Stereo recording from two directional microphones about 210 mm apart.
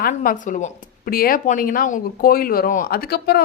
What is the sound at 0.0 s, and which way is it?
Speech, 40° left (ahead or behind).